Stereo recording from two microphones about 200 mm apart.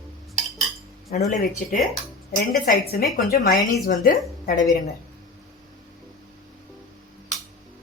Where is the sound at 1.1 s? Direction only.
45° left (ahead or behind).